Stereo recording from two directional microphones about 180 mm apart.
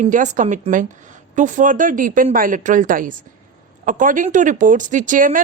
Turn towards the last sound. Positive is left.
turn(degrees=-50)  # may be behind; listen again after turning